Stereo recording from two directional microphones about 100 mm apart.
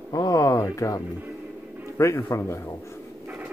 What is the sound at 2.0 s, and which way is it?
Speech, 25° left (ahead or behind).